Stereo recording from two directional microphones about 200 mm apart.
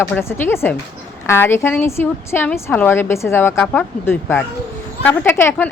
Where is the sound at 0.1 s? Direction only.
10° left (ahead or behind).